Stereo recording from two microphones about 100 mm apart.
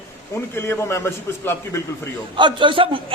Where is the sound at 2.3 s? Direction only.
55° right (ahead or behind).